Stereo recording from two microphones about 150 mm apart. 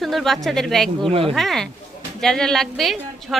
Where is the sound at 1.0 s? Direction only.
40° right (ahead or behind).